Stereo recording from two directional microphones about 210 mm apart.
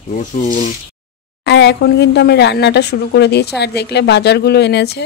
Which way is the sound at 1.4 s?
55° left (ahead or behind).